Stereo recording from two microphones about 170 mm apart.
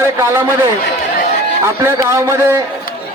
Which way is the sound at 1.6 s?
15° right (ahead or behind).